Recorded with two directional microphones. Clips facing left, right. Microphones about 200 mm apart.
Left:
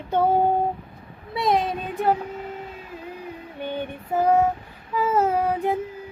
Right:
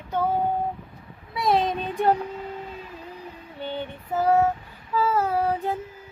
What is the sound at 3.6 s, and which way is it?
Female singing, 15° left (ahead or behind).